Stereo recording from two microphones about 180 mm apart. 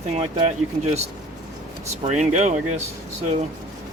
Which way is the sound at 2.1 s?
40° right (ahead or behind).